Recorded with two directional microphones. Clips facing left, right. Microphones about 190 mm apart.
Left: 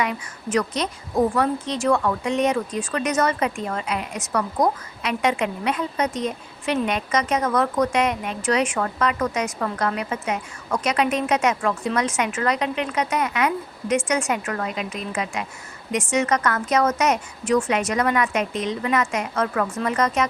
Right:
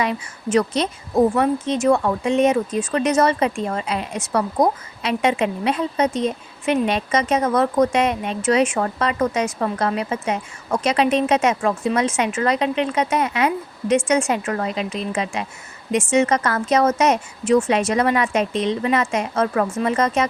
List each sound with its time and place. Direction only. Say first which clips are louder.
0.0 s a woman's voice: right 3 dB; 25° right (ahead or behind)